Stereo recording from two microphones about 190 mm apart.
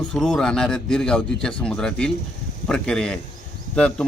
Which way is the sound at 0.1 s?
5° left (ahead or behind).